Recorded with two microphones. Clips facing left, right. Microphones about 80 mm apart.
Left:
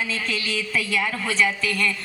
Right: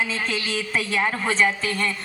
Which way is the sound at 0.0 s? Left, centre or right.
Right.